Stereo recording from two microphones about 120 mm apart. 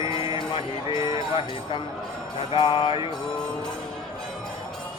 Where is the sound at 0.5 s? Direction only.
45° left (ahead or behind).